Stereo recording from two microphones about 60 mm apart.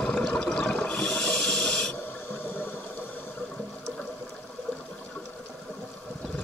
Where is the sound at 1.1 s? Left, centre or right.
Centre.